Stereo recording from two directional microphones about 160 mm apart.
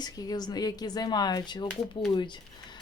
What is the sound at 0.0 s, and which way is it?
Speech, 25° left (ahead or behind).